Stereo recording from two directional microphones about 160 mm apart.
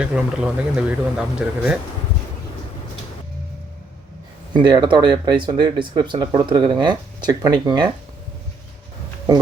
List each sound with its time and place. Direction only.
0.0 s speech: 5° right (ahead or behind)
4.5 s speech: 30° right (ahead or behind)